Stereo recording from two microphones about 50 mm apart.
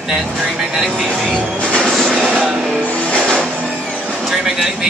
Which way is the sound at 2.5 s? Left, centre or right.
Centre.